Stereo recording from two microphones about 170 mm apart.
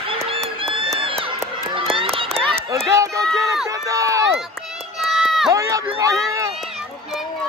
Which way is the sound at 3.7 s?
20° right (ahead or behind).